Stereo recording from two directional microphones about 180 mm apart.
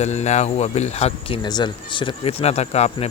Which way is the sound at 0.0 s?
40° left (ahead or behind).